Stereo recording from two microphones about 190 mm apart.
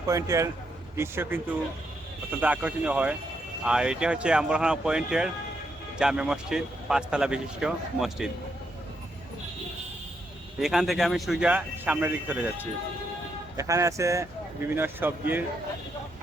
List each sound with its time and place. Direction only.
0.1 s speech: 15° right (ahead or behind)
2.4 s speech: 10° right (ahead or behind)
10.6 s speech: centre (ahead or behind)